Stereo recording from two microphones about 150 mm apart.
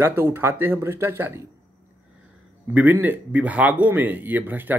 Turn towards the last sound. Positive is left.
turn(degrees=-10)  # may be behind; listen again after turning